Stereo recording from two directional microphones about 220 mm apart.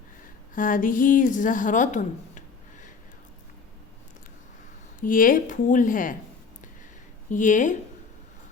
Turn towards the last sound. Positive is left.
turn(degrees=35)  # may be behind; listen again after turning